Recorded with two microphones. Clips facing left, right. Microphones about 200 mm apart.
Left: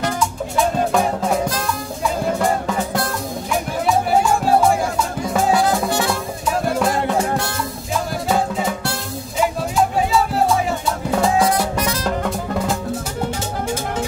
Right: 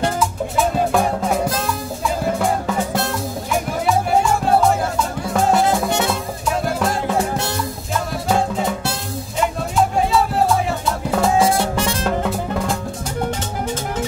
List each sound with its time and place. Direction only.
0.2 s music: centre (ahead or behind)
5.3 s music: centre (ahead or behind)
5.9 s music: 20° right (ahead or behind)
6.8 s music: centre (ahead or behind)
8.3 s music: centre (ahead or behind)
11.1 s music: centre (ahead or behind)
11.3 s music: 25° right (ahead or behind)